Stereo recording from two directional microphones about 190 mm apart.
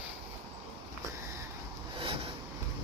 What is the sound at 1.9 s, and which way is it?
Vehicle, 30° right (ahead or behind).